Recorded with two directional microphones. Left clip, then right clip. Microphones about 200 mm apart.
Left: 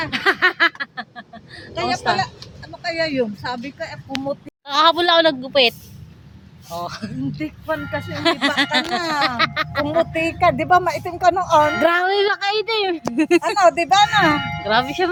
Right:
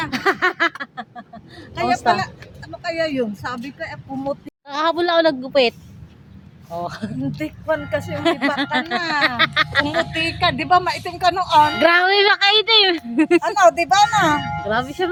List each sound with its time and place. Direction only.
0.1 s a sound: 20° right (ahead or behind)
1.7 s a woman's voice: 55° right (ahead or behind)
2.8 s speech: 25° right (ahead or behind)
3.8 s speech: 10° right (ahead or behind)
7.3 s speech: 45° right (ahead or behind)
8.1 s speech: 15° right (ahead or behind)
9.0 s speech: 55° left (ahead or behind)
9.4 s speech: centre (ahead or behind)
10.1 s speech: 50° left (ahead or behind)
11.8 s speech: centre (ahead or behind)
13.6 s speech: 25° left (ahead or behind)
14.6 s speech: centre (ahead or behind)